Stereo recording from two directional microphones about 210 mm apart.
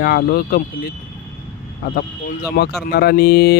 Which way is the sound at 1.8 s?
50° left (ahead or behind).